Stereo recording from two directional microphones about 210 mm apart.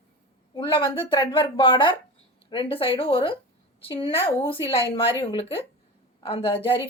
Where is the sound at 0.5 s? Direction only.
25° left (ahead or behind).